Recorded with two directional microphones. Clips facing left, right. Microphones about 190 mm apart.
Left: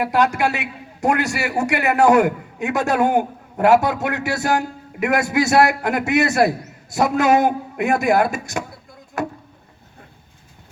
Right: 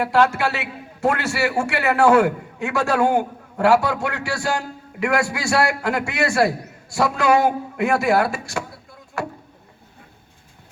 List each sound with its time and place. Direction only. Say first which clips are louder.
0.0 s a man's voice: even; 15° left (ahead or behind)